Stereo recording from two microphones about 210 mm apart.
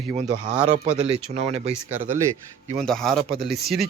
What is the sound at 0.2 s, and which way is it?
Speech, 35° right (ahead or behind).